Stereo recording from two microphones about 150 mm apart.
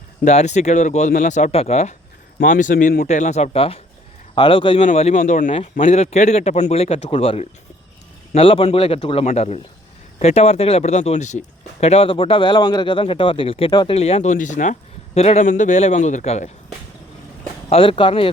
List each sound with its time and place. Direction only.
0.3 s speech: 50° left (ahead or behind)
2.4 s speech: 65° left (ahead or behind)
3.1 s speech: 50° left (ahead or behind); by 4.8 s 35° left (ahead or behind)
4.8 s speech: 45° left (ahead or behind)
17.7 s speech: 35° left (ahead or behind)